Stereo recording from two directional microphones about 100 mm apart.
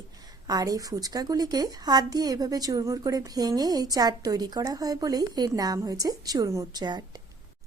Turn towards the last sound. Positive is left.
turn(degrees=-45)  # may be behind; listen again after turning